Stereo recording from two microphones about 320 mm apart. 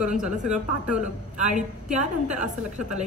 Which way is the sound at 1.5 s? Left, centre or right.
Right.